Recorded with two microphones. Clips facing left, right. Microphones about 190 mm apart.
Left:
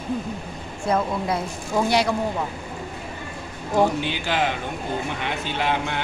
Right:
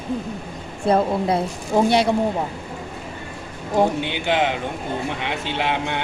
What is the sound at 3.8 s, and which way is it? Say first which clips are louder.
Speech: right 1 dB; 20° right (ahead or behind).